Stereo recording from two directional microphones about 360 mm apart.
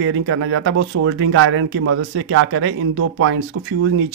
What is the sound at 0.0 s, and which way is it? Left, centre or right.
Speech, right.